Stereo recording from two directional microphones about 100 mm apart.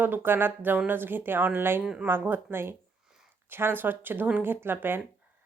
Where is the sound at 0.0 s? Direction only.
20° right (ahead or behind).